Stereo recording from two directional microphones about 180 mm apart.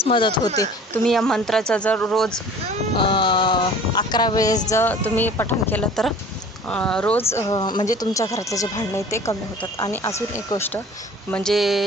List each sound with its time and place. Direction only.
0.0 s speech: 25° left (ahead or behind)
1.0 s speech: centre (ahead or behind)
2.9 s speech: 30° left (ahead or behind); by 11.9 s centre (ahead or behind)